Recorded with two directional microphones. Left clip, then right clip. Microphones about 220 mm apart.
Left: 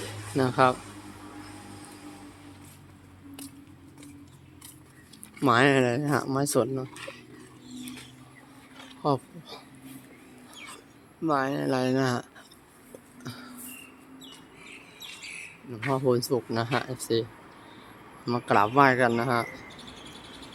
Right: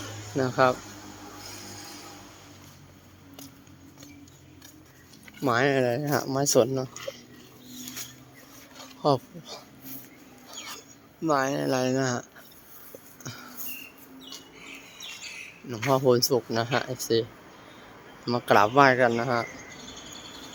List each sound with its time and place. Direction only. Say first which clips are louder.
0.3 s speech: even; 10° left (ahead or behind)
5.4 s speech: left 2 dB; 15° left (ahead or behind)
8.8 s a sound: right 3 dB; 5° right (ahead or behind)
13.2 s a sound: right 1 dB; centre (ahead or behind)
16.0 s speech: right 3 dB; 10° right (ahead or behind)
18.3 s speech: right 3 dB; 5° right (ahead or behind)